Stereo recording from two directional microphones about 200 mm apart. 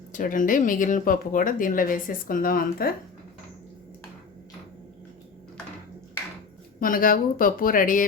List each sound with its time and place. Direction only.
0.1 s speech: 40° left (ahead or behind)
6.7 s speech: 45° left (ahead or behind)